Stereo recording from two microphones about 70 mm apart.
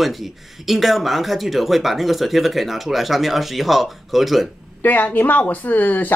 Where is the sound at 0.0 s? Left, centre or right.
Centre.